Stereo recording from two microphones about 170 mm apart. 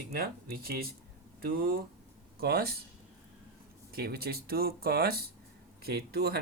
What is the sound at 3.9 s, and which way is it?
Speech, 65° right (ahead or behind).